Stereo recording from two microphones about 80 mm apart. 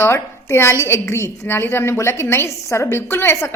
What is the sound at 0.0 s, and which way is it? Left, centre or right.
A woman's voice, left.